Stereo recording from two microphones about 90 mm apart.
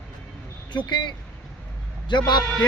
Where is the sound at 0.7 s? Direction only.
60° left (ahead or behind).